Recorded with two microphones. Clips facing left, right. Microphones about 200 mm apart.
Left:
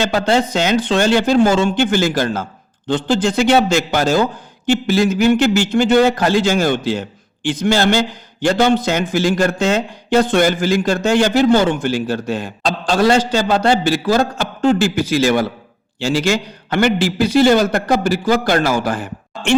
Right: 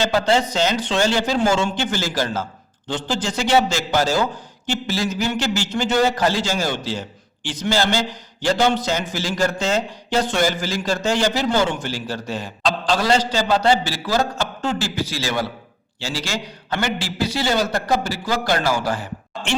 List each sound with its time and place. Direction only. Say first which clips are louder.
0.0 s a man's voice: left 3 dB; 55° left (ahead or behind)